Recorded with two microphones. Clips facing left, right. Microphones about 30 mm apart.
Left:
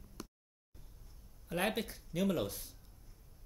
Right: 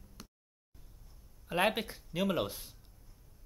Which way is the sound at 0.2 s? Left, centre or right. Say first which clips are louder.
Left 5 dB; centre.